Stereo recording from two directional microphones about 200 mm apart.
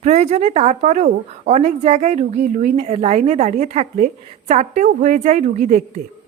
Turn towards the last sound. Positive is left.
turn(degrees=-35)  # may be behind; listen again after turning